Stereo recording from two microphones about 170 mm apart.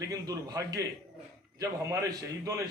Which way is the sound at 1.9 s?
20° right (ahead or behind).